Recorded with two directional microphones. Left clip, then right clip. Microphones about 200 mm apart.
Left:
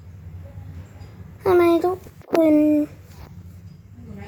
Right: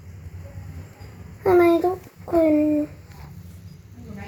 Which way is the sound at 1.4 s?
25° left (ahead or behind).